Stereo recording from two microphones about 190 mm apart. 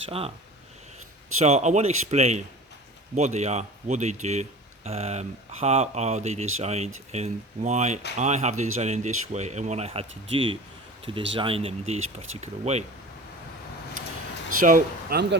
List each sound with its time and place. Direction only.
0.1 s speech: 30° right (ahead or behind)
1.4 s speech: 35° right (ahead or behind)
14.6 s speech: 45° right (ahead or behind)